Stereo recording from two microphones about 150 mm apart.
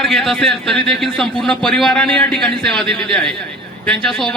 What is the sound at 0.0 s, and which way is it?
A man's voice, centre (ahead or behind).